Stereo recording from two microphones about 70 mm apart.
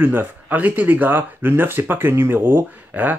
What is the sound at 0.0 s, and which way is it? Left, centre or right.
Speech, right.